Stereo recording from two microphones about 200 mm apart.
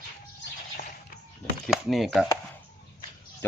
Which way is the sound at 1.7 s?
Centre (ahead or behind).